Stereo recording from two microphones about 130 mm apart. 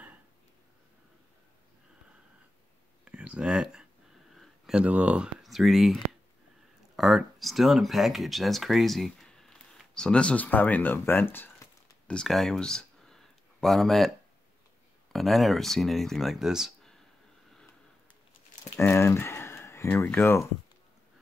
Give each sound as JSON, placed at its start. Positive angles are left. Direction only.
{"t": 3.1, "sound": "speech", "side_deg": -10}
{"t": 12.2, "sound": "speech", "side_deg": 5}
{"t": 15.1, "sound": "speech", "side_deg": 0}
{"t": 18.9, "sound": "speech", "side_deg": 20}